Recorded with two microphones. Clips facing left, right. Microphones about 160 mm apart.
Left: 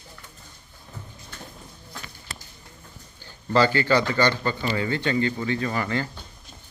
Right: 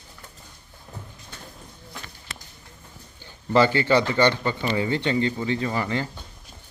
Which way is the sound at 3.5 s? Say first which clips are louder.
Right 1 dB; 25° right (ahead or behind).